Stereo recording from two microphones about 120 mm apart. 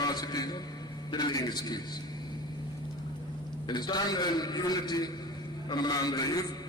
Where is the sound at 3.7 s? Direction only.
35° left (ahead or behind).